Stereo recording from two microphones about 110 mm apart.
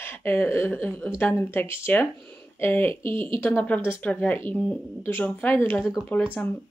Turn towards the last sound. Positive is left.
turn(degrees=15)  # may be behind; listen again after turning